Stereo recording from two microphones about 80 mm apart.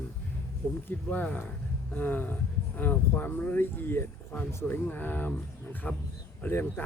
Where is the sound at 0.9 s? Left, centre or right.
Left.